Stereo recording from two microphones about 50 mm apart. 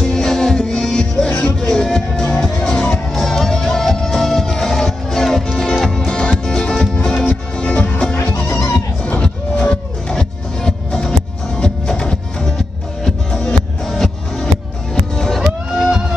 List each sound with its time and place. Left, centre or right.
0.0 s music: centre
3.2 s music: centre
7.5 s music: left
8.5 s music: left
9.2 s music: centre
15.7 s a sound: centre